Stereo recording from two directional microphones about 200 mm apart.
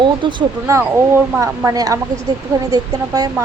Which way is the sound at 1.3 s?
15° right (ahead or behind).